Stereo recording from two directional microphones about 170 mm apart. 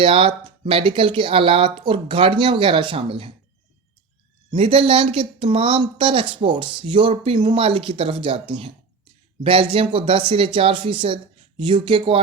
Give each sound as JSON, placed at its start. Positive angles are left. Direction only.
{"t": 0.0, "sound": "speech", "side_deg": -30}
{"t": 4.5, "sound": "speech", "side_deg": -35}